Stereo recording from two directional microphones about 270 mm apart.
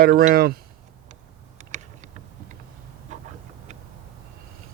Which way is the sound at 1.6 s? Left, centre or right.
Right.